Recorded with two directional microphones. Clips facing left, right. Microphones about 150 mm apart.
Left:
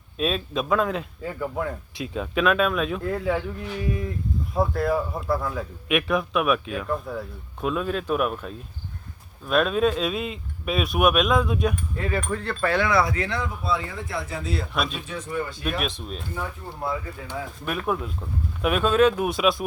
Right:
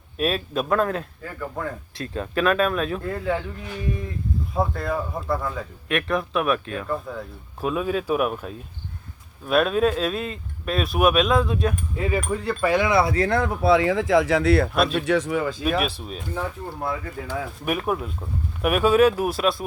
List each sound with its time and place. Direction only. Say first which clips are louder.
0.2 s speech: right 1 dB; 5° right (ahead or behind)
1.2 s speech: left 2 dB; 10° left (ahead or behind)
4.5 s speech: left 2 dB; centre (ahead or behind)
11.9 s speech: right 2 dB; 10° right (ahead or behind)
13.1 s speech: right 7 dB; 50° right (ahead or behind); by 14.7 s 70° right (ahead or behind)
14.7 s speech: right 6 dB; centre (ahead or behind)
14.9 s speech: right 8 dB; 85° right
15.6 s speech: right 4 dB; 5° right (ahead or behind)
17.7 s speech: right 2 dB; 10° right (ahead or behind)